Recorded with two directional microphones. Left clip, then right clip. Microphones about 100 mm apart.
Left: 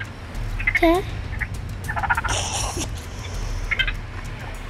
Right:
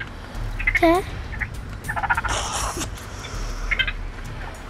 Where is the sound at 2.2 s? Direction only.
15° right (ahead or behind).